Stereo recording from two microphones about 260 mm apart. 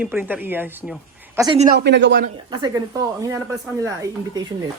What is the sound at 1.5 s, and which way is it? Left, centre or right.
Speech, right.